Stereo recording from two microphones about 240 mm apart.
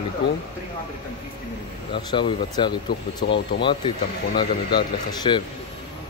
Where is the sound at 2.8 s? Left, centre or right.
Left.